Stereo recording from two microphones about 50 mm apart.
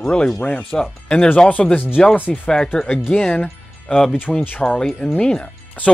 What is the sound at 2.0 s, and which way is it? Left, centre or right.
Speech, centre.